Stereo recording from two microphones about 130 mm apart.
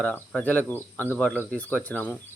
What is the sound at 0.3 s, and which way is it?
Speech, 10° left (ahead or behind).